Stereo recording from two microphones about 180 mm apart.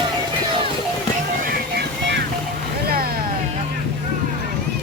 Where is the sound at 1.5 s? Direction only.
65° right (ahead or behind).